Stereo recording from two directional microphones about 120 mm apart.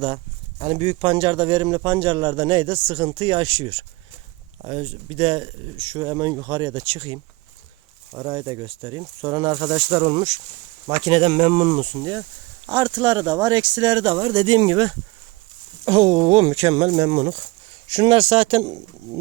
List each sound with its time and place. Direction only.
0.6 s a man's voice: 60° right (ahead or behind)
8.1 s speech: 30° right (ahead or behind)
8.4 s speech: 40° right (ahead or behind)
11.0 s speech: 60° right (ahead or behind)
11.9 s a man's voice: 40° right (ahead or behind); by 17.4 s 70° right (ahead or behind)
17.9 s speech: 55° right (ahead or behind)